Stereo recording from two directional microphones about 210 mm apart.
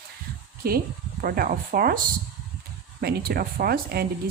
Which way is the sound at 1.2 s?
45° right (ahead or behind).